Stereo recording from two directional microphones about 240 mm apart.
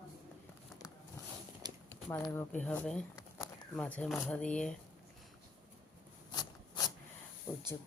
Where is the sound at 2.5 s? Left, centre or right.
Centre.